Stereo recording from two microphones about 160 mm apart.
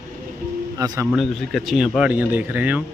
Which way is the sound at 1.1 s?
Centre (ahead or behind).